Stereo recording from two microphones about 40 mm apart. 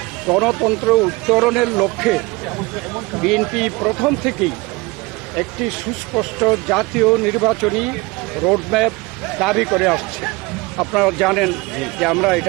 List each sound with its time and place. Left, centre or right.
0.3 s speech: centre